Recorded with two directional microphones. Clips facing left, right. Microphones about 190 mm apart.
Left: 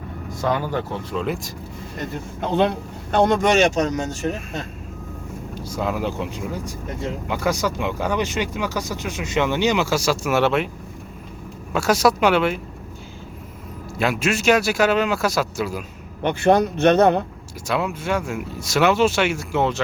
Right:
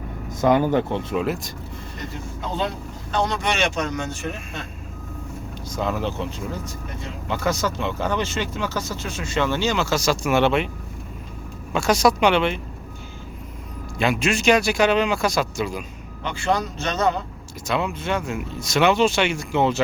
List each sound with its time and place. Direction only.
0.3 s speech: 20° right (ahead or behind)
1.2 s speech: centre (ahead or behind)
2.4 s speech: 60° left (ahead or behind); by 4.6 s 40° left (ahead or behind)
5.6 s speech: 10° left (ahead or behind)
11.7 s speech: 5° left (ahead or behind)
14.0 s speech: 5° left (ahead or behind)
16.2 s speech: 55° left (ahead or behind)
17.7 s speech: 5° left (ahead or behind)